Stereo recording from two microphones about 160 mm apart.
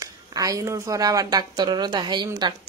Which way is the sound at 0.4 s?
20° right (ahead or behind).